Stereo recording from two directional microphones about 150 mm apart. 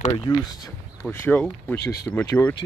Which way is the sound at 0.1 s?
25° left (ahead or behind).